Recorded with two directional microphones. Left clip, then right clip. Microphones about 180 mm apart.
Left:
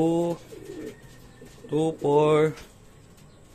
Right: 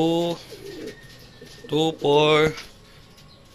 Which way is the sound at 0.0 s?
10° left (ahead or behind).